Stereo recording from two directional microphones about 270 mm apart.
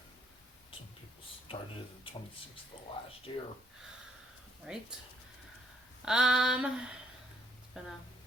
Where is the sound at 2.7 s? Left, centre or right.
Centre.